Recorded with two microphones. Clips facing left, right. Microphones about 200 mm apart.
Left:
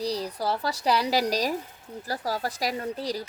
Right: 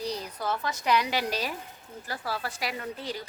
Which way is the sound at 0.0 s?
35° left (ahead or behind).